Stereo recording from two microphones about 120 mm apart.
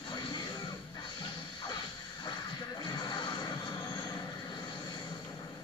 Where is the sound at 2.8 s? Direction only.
40° left (ahead or behind).